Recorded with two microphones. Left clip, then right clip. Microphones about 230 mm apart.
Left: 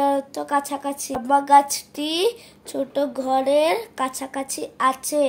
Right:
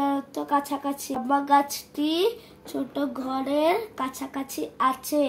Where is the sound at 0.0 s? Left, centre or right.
Left.